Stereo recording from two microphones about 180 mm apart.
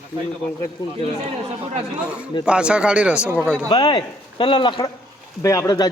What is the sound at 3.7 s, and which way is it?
Speech, 30° left (ahead or behind).